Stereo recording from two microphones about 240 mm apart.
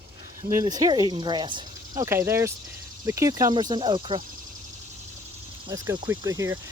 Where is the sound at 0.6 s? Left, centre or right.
Centre.